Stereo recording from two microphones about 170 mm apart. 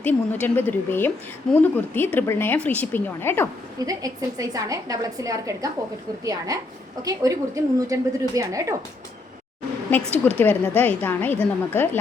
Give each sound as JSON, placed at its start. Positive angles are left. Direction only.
{"t": 0.0, "sound": "a woman's voice", "side_deg": 10}
{"t": 3.8, "sound": "a woman's voice", "side_deg": -20}
{"t": 9.9, "sound": "a woman's voice", "side_deg": 10}